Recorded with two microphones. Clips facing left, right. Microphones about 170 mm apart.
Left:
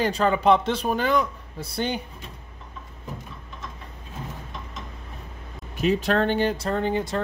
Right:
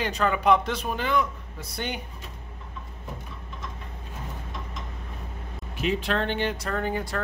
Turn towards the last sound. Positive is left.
turn(degrees=25)  # may be behind; listen again after turning